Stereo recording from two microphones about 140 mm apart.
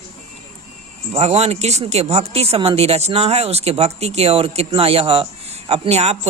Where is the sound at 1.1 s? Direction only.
50° right (ahead or behind).